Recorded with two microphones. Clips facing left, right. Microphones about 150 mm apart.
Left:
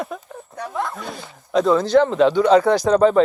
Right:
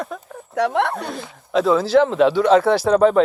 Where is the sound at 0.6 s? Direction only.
75° right (ahead or behind).